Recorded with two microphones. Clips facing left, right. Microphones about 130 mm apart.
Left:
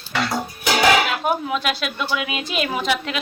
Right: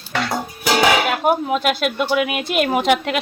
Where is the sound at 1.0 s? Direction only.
50° right (ahead or behind).